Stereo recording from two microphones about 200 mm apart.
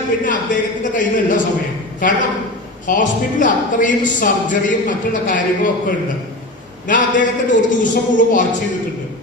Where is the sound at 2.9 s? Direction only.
40° left (ahead or behind).